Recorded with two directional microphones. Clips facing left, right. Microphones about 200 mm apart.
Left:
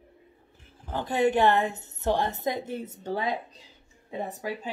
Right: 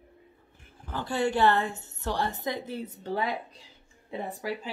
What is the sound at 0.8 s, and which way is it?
A woman's voice, 20° left (ahead or behind).